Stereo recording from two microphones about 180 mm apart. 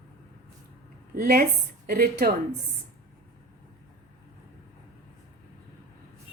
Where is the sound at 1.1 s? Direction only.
55° right (ahead or behind).